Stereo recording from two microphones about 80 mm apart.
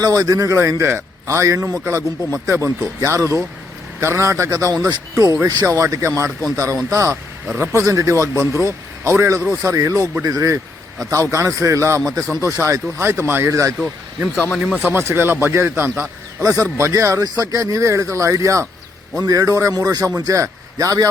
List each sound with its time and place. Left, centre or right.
0.0 s a man's voice: right
14.9 s speech: right
16.4 s a man's voice: right